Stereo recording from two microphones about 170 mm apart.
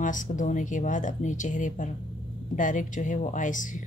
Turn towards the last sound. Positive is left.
turn(degrees=50)  # may be behind; listen again after turning